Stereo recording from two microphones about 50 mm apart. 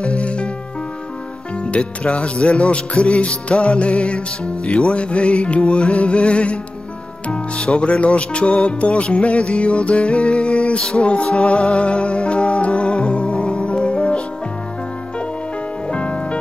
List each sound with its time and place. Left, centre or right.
0.0 s music: left
1.6 s music: left
10.8 s music: centre
15.9 s music: left